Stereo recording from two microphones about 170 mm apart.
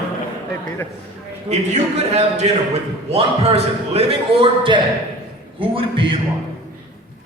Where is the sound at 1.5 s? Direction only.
40° right (ahead or behind).